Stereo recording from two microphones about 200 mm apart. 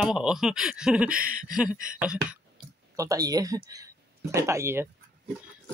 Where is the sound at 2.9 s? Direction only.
15° right (ahead or behind).